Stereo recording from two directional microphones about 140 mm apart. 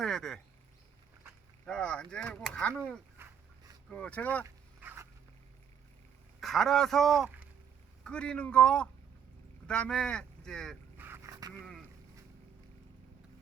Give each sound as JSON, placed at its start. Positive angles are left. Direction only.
{"t": 0.0, "sound": "speech", "side_deg": 5}
{"t": 1.6, "sound": "speech", "side_deg": 5}
{"t": 3.2, "sound": "a sound", "side_deg": -15}
{"t": 3.8, "sound": "speech", "side_deg": 10}
{"t": 4.4, "sound": "dog", "side_deg": -15}
{"t": 6.4, "sound": "a man's voice", "side_deg": 0}
{"t": 10.9, "sound": "dog", "side_deg": -15}
{"t": 11.6, "sound": "boat", "side_deg": 0}